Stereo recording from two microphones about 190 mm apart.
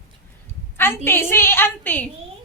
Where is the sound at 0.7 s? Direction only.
10° left (ahead or behind).